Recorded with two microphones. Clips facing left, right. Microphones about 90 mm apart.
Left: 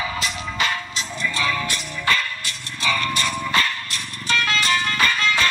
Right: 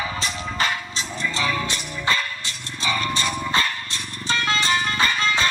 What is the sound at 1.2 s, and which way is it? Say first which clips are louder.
Music: left 1 dB; 20° right (ahead or behind).